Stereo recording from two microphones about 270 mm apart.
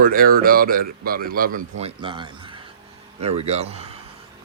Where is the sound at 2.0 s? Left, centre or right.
Centre.